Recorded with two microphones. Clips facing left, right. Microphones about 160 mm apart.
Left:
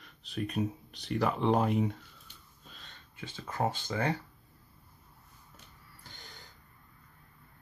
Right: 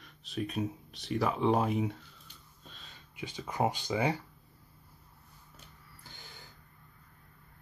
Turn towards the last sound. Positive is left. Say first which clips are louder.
# even
turn(degrees=-5)  # may be behind; listen again after turning